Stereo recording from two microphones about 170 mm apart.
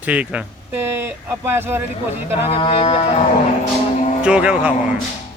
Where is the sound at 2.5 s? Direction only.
35° left (ahead or behind).